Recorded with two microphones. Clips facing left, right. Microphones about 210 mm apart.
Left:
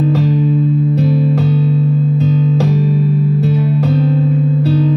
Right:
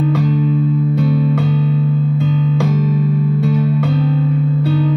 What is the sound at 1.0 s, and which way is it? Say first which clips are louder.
Music: left 2 dB; 40° left (ahead or behind).